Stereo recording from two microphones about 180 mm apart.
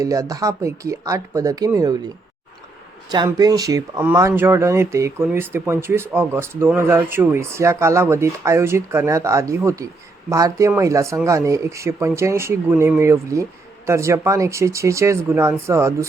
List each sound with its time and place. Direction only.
0.0 s speech: 20° right (ahead or behind)
3.2 s speech: 20° right (ahead or behind)